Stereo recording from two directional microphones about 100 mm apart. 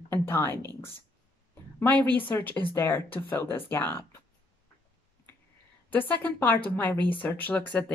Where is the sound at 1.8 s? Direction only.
15° left (ahead or behind).